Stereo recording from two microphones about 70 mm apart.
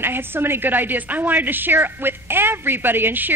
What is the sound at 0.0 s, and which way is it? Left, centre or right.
A woman's voice, right.